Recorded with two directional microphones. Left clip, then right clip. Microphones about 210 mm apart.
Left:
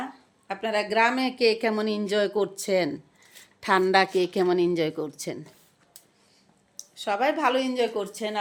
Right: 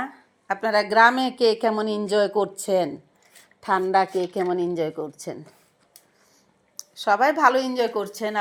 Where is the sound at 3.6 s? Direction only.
15° left (ahead or behind).